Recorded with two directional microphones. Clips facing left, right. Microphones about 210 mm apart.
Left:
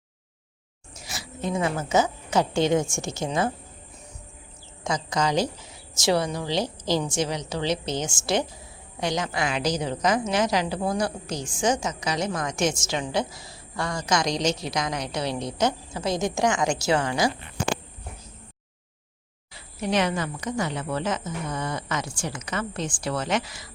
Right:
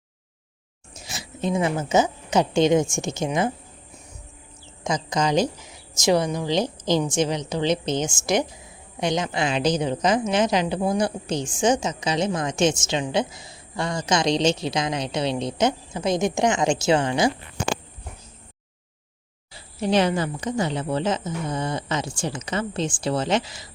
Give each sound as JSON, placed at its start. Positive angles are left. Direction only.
{"t": 0.9, "sound": "a woman's voice", "side_deg": -20}
{"t": 4.8, "sound": "a woman's voice", "side_deg": -20}
{"t": 19.5, "sound": "a woman's voice", "side_deg": -30}